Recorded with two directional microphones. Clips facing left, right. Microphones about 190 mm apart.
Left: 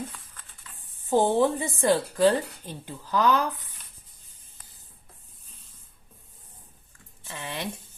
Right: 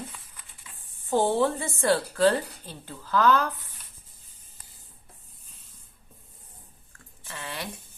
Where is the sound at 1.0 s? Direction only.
15° left (ahead or behind).